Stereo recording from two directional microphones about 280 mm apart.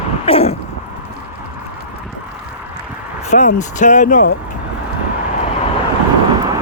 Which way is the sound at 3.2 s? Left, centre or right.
Left.